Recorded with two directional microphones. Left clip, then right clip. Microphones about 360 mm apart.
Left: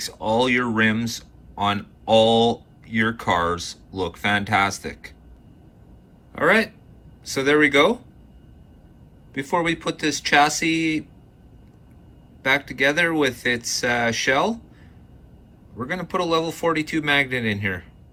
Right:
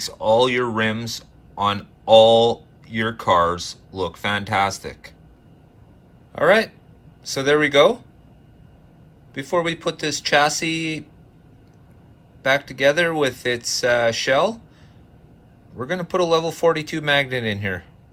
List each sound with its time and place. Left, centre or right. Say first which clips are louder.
0.0 s speech: right 4 dB; centre
6.3 s speech: right 2 dB; centre
9.3 s speech: even; centre
12.4 s speech: right 2 dB; centre
15.8 s speech: right 3 dB; centre